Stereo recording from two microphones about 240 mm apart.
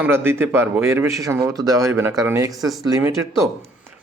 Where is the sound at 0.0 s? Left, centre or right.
Centre.